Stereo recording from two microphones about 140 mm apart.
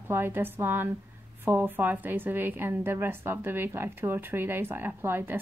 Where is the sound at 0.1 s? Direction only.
15° right (ahead or behind).